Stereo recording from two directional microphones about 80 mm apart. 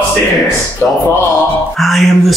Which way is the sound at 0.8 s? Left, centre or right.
Left.